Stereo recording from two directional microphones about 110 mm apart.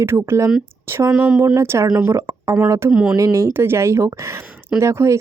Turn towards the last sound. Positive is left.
turn(degrees=-25)  # may be behind; listen again after turning